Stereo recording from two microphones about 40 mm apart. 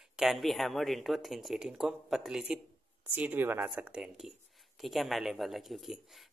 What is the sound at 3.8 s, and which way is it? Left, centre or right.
Speech, right.